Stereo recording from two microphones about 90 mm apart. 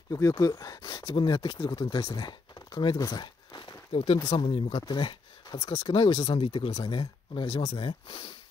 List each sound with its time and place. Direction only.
0.4 s speech: 40° left (ahead or behind); by 3.0 s 60° left (ahead or behind)
3.0 s a sound: 50° left (ahead or behind)
3.9 s speech: 90° left
4.2 s speech: 45° left (ahead or behind)
4.5 s speech: 75° left (ahead or behind); by 5.6 s 55° left (ahead or behind)
5.6 s speech: 40° left (ahead or behind)
5.9 s speech: 60° left (ahead or behind)